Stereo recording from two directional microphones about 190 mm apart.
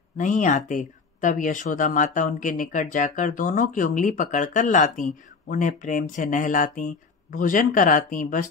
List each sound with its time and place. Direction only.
0.2 s speech: 40° left (ahead or behind)